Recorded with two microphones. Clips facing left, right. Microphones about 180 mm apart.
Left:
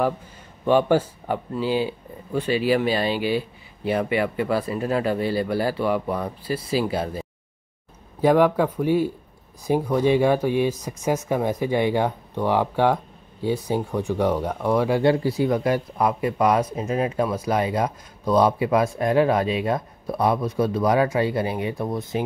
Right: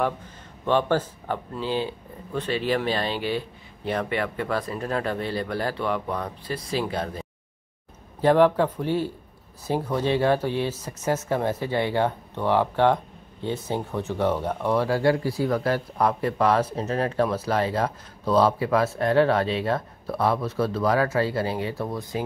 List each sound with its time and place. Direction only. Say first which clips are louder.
0.7 s speech: left 4 dB; 10° left (ahead or behind)